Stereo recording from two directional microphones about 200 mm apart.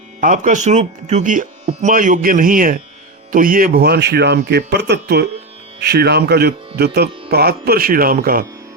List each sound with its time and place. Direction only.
0.2 s speech: 40° right (ahead or behind)